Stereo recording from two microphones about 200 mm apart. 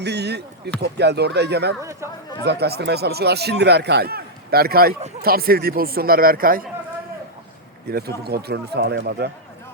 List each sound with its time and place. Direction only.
0.0 s speech: 55° right (ahead or behind)
1.8 s speech: 15° right (ahead or behind)
2.4 s speech: 55° right (ahead or behind)
7.9 s speech: 50° right (ahead or behind)